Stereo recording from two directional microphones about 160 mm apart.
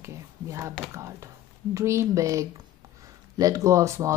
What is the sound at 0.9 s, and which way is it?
Speech, 20° right (ahead or behind).